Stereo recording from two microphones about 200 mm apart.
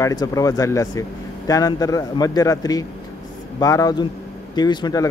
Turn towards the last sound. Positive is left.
turn(degrees=20)  # may be behind; listen again after turning